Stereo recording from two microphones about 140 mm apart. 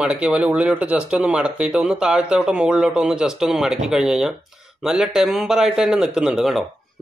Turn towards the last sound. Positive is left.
turn(degrees=0)  # may be behind; listen again after turning